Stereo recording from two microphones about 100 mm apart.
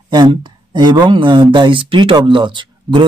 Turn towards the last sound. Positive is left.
turn(degrees=-55)  # may be behind; listen again after turning